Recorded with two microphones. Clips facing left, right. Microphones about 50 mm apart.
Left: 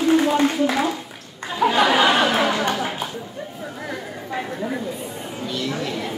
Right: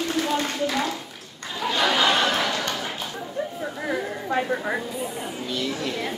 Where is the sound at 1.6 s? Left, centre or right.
Centre.